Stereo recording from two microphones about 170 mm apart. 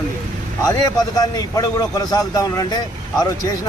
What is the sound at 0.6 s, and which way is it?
A man's voice, 20° left (ahead or behind).